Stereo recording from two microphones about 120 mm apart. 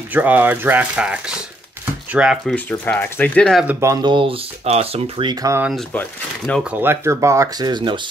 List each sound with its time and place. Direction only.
0.1 s speech: 15° right (ahead or behind)
2.5 s speech: 15° left (ahead or behind)
4.0 s speech: 45° right (ahead or behind)
5.3 s speech: 30° right (ahead or behind)
5.9 s speech: 10° left (ahead or behind)
6.6 s speech: 15° right (ahead or behind); by 8.0 s 40° right (ahead or behind)